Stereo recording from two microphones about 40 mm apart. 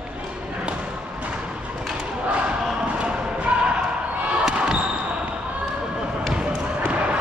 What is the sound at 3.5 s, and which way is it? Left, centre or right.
Basketball bounce, right.